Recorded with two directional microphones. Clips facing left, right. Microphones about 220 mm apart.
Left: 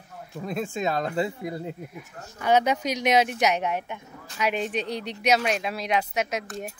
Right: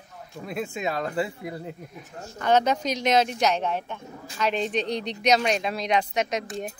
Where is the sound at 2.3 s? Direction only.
10° left (ahead or behind).